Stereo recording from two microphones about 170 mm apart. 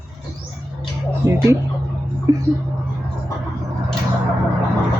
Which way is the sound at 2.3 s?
20° right (ahead or behind).